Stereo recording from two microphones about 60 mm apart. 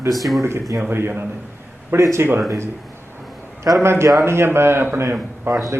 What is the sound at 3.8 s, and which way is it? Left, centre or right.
A man's voice, right.